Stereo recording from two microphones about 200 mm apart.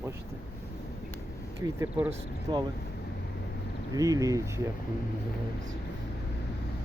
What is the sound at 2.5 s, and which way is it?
Speech, 25° right (ahead or behind).